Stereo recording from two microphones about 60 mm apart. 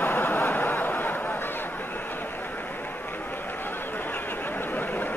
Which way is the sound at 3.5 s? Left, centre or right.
Left.